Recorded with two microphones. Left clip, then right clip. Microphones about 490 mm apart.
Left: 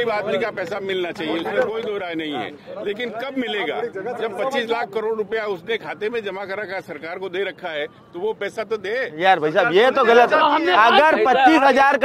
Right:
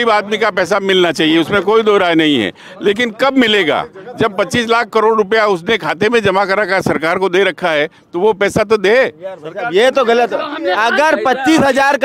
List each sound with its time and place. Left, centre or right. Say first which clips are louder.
0.0 s speech: right 9 dB; right
9.8 s a man's voice: right 4 dB; centre